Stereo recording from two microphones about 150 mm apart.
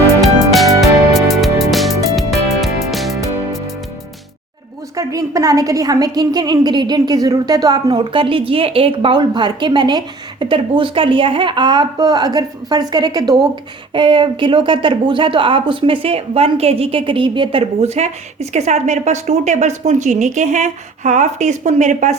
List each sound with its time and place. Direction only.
0.8 s music: centre (ahead or behind)
4.9 s a woman's voice: 20° right (ahead or behind); by 22.1 s 50° right (ahead or behind)